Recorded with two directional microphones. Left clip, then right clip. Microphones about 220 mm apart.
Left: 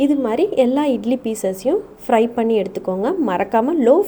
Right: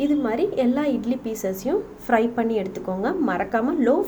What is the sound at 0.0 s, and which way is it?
A woman's voice, 30° left (ahead or behind).